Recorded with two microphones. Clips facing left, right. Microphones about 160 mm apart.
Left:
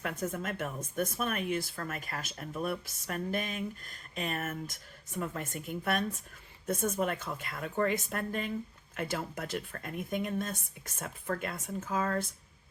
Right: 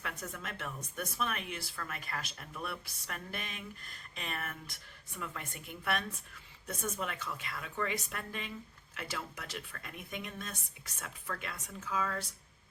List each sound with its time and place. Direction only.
0.0 s speech: 50° left (ahead or behind)